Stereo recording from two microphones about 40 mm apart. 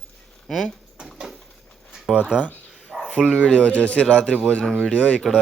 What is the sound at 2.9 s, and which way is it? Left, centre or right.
Dog, centre.